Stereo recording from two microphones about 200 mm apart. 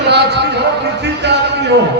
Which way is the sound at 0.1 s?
55° right (ahead or behind).